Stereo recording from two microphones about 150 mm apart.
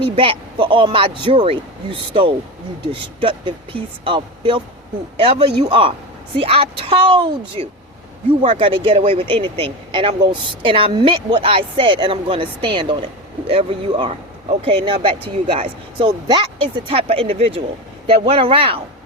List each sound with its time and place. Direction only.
0.0 s speech: 35° right (ahead or behind)